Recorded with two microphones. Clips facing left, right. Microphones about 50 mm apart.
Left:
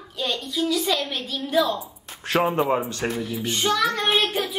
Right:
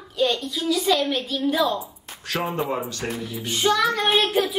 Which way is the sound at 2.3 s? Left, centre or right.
Left.